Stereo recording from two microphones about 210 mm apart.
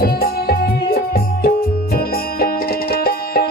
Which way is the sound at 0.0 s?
45° left (ahead or behind).